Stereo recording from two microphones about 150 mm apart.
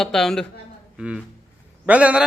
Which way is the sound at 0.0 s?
5° left (ahead or behind).